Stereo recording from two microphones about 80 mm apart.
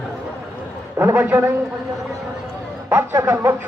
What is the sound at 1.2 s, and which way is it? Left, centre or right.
Speech, right.